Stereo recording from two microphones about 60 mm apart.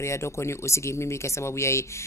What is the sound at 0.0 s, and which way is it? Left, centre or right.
Speech, left.